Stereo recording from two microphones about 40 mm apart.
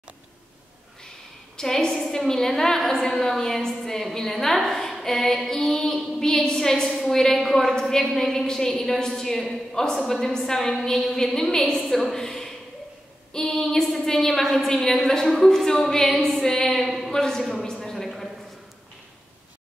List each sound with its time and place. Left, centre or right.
1.6 s a woman's voice: centre
1.9 s a woman's voice: centre
2.2 s a woman's voice: centre
17.5 s a sound: centre